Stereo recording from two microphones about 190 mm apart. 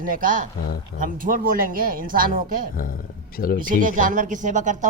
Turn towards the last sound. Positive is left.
turn(degrees=-40)  # may be behind; listen again after turning